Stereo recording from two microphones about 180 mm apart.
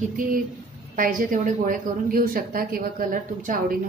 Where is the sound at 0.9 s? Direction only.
50° right (ahead or behind).